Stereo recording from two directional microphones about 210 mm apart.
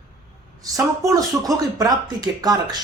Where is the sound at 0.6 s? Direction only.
15° right (ahead or behind).